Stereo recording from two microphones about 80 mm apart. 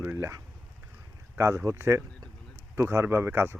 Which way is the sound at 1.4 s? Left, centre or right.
Right.